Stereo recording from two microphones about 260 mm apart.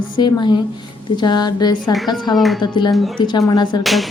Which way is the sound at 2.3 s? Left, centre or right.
Centre.